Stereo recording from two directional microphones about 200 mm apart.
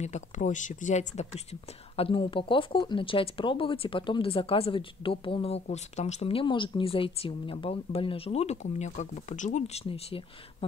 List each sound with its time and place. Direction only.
0.0 s speech: 35° left (ahead or behind)